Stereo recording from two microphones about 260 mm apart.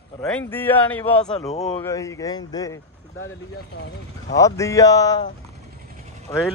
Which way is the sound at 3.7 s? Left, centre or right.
Left.